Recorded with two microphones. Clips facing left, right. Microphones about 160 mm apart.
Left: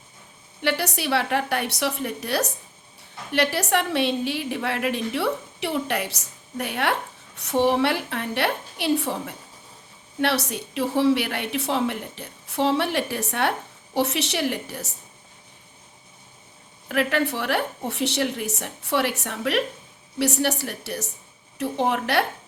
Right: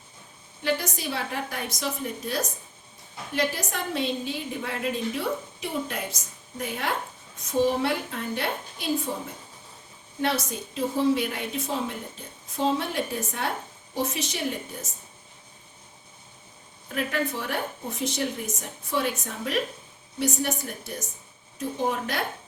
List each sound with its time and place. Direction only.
0.6 s a woman's voice: 75° left (ahead or behind)
16.9 s a woman's voice: 75° left (ahead or behind)